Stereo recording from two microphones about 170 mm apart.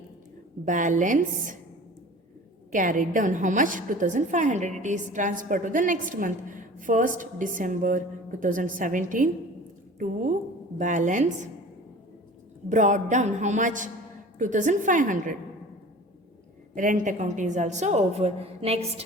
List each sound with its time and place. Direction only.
0.6 s a woman's voice: 50° right (ahead or behind)
2.7 s a woman's voice: 50° right (ahead or behind)
10.8 s a woman's voice: 50° right (ahead or behind)
12.6 s a woman's voice: 45° right (ahead or behind)
16.7 s a woman's voice: 50° right (ahead or behind)